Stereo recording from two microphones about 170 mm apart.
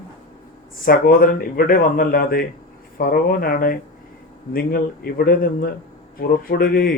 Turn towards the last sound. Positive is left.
turn(degrees=60)  # may be behind; listen again after turning